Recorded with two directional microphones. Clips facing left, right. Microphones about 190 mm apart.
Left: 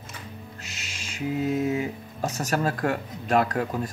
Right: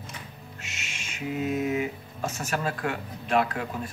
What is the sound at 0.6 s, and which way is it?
Owl, 35° left (ahead or behind).